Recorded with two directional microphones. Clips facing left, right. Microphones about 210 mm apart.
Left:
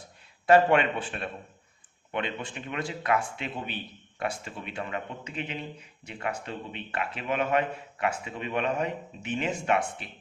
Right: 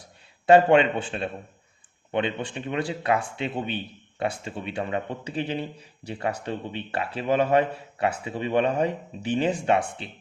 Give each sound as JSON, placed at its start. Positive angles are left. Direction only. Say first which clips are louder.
{"t": 0.4, "sound": "speech", "louder": "right 4 dB", "side_deg": -30}